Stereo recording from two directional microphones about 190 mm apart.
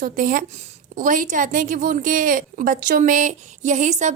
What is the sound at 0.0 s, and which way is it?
A woman's voice, 45° right (ahead or behind).